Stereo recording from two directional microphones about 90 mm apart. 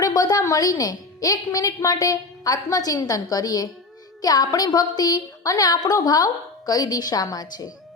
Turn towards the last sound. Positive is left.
turn(degrees=45)  # may be behind; listen again after turning